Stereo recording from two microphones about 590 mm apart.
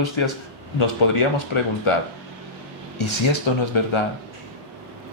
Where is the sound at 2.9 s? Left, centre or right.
Left.